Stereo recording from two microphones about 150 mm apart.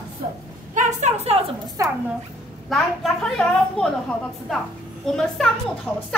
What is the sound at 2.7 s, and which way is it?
A woman's voice, centre (ahead or behind).